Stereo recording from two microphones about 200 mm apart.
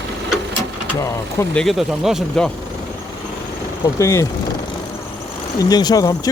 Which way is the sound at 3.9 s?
15° left (ahead or behind).